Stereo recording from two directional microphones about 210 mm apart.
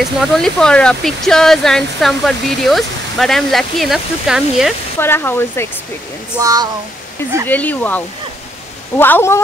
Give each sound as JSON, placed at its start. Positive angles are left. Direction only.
{"t": 0.0, "sound": "speech", "side_deg": 0}
{"t": 4.9, "sound": "speech", "side_deg": 10}
{"t": 6.3, "sound": "speech", "side_deg": -20}
{"t": 7.4, "sound": "speech", "side_deg": 10}